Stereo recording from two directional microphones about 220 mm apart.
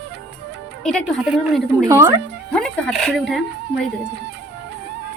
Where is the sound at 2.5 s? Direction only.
5° left (ahead or behind).